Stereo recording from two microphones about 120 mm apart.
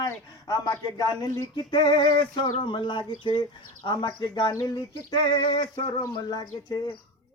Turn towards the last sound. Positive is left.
turn(degrees=35)  # may be behind; listen again after turning